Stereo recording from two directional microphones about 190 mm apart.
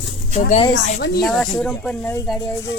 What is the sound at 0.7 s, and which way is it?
Speech, 65° left (ahead or behind).